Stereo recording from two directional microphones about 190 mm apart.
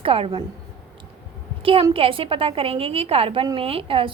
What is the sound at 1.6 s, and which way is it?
A woman's voice, 30° right (ahead or behind).